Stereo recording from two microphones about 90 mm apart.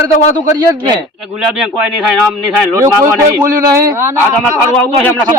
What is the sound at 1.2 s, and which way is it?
Speech, 10° right (ahead or behind).